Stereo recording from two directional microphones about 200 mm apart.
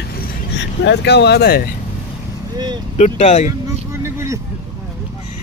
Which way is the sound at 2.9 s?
35° left (ahead or behind).